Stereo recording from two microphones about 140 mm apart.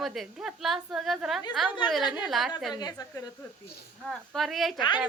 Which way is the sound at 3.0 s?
30° left (ahead or behind).